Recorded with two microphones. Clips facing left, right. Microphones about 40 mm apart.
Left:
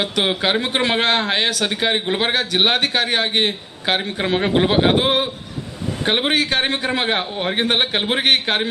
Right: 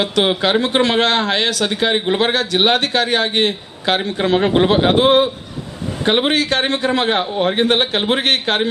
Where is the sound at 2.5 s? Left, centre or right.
Centre.